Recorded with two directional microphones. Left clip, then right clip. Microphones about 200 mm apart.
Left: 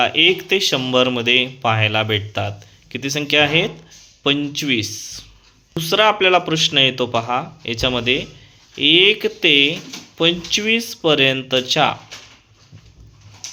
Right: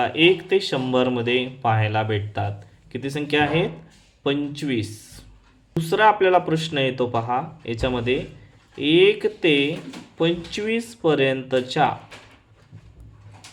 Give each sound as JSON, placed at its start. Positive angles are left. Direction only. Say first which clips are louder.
{"t": 0.0, "sound": "speech", "louder": "left 3 dB", "side_deg": 20}